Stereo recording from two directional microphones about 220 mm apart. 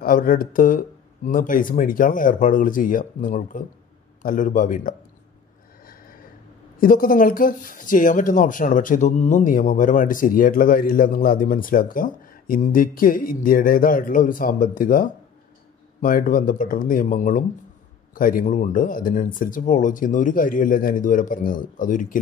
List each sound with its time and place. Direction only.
0.0 s speech: 40° left (ahead or behind)
6.8 s speech: 40° left (ahead or behind)